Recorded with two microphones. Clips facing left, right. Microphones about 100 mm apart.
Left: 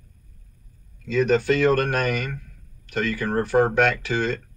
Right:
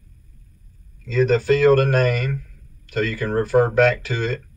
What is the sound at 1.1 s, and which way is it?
Speech, 40° right (ahead or behind).